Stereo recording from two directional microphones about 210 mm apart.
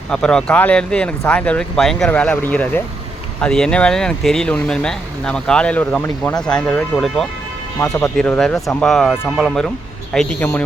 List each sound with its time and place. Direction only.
0.1 s speech: 5° left (ahead or behind)